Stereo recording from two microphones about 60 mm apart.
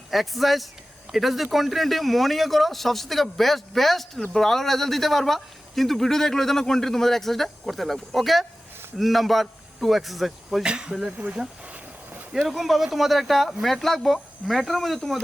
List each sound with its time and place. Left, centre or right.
0.1 s a man's voice: centre
10.6 s speech: centre
12.5 s a man's voice: centre